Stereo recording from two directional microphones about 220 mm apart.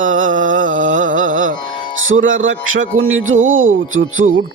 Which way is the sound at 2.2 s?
60° right (ahead or behind).